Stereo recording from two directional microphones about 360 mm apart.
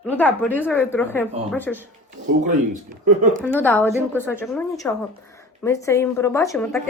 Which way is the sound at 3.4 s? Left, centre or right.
Centre.